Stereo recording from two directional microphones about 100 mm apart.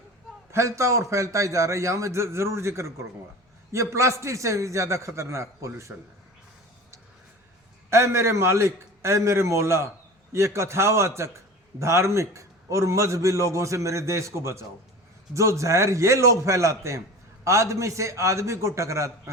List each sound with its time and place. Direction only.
0.5 s a man's voice: 30° right (ahead or behind)
7.9 s a man's voice: 25° right (ahead or behind)